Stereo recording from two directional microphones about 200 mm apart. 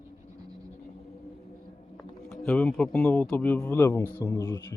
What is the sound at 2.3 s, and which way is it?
Speech, 5° left (ahead or behind).